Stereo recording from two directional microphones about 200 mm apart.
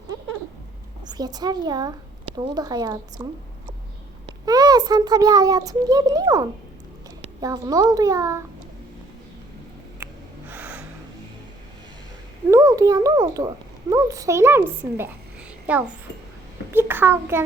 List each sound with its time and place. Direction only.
1.0 s a woman's voice: 20° right (ahead or behind)
4.4 s a child's voice: 20° right (ahead or behind)
10.5 s gasp: 5° right (ahead or behind)
12.5 s a child's voice: 15° right (ahead or behind)